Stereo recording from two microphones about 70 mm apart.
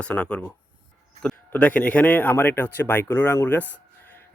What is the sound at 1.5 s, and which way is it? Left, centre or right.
Speech, left.